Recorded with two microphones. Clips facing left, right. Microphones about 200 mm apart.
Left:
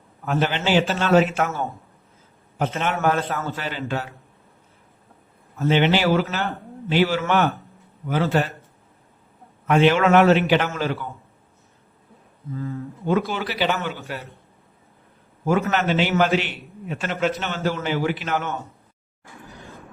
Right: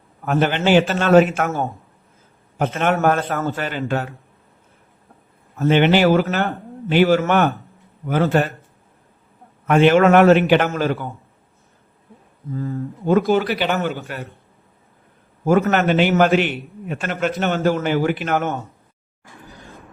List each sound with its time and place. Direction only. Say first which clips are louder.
0.3 s a man's voice: right 5 dB; 55° right (ahead or behind)
2.6 s a man's voice: right 5 dB; 55° right (ahead or behind)
5.5 s a man's voice: right 4 dB; 55° right (ahead or behind)
9.6 s a man's voice: right 4 dB; 50° right (ahead or behind)
12.5 s a man's voice: right 4 dB; 40° right (ahead or behind)
15.4 s a man's voice: right 5 dB; 50° right (ahead or behind)